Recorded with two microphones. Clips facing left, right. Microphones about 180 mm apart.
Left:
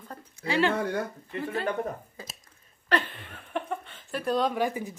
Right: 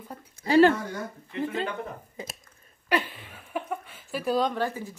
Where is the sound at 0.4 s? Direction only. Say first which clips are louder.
Right 7 dB; 40° right (ahead or behind).